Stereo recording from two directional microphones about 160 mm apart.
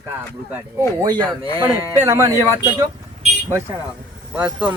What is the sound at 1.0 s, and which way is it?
Speech, 30° right (ahead or behind).